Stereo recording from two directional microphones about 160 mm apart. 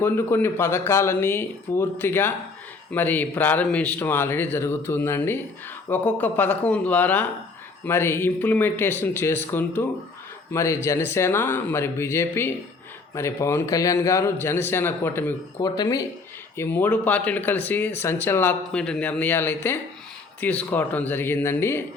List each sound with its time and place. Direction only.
0.0 s speech: 15° left (ahead or behind)
16.6 s speech: 10° left (ahead or behind)